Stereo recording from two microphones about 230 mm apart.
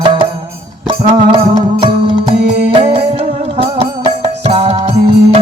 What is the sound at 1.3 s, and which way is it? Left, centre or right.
Music, centre.